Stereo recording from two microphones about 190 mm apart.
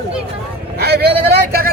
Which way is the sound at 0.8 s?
55° right (ahead or behind).